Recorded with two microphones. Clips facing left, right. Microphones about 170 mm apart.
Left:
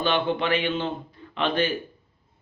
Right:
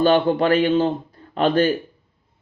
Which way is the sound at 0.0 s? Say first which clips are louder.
Right 8 dB; 40° right (ahead or behind).